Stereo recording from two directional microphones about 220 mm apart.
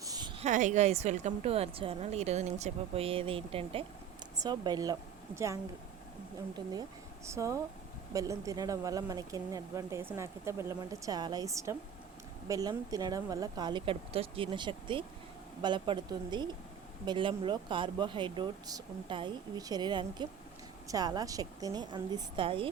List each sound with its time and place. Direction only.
0.0 s a woman's voice: 20° right (ahead or behind)
7.3 s a woman's voice: 15° right (ahead or behind)